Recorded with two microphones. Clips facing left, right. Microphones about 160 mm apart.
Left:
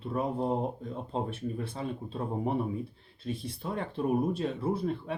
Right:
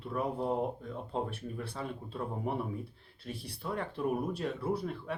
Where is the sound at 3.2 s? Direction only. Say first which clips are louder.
Left 5 dB; 20° left (ahead or behind).